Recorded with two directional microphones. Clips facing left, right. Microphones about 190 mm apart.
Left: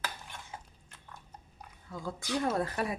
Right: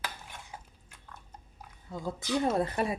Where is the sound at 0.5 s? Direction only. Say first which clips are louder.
Left 1 dB; 10° right (ahead or behind).